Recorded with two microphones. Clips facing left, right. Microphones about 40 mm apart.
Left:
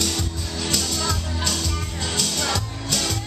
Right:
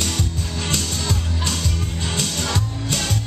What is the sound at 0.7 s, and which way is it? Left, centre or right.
Music, right.